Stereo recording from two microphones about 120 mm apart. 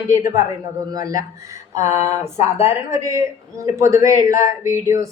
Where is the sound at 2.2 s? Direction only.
20° right (ahead or behind).